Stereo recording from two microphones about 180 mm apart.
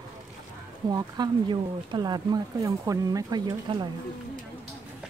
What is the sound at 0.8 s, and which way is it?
Speech, 25° right (ahead or behind).